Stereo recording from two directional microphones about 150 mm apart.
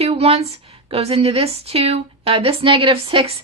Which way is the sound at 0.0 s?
40° right (ahead or behind).